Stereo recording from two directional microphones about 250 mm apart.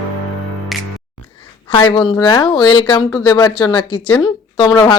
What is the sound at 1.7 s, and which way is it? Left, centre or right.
Speech, centre.